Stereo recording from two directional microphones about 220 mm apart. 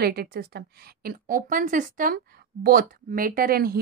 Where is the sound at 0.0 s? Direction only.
45° right (ahead or behind).